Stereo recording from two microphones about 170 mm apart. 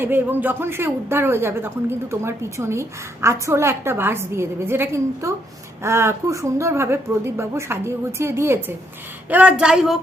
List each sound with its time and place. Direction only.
0.0 s a woman's voice: 10° right (ahead or behind)